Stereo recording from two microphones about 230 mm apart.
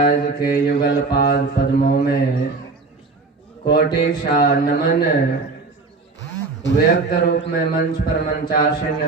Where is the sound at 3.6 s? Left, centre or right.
Left.